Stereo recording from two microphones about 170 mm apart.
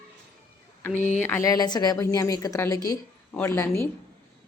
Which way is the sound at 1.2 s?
15° left (ahead or behind).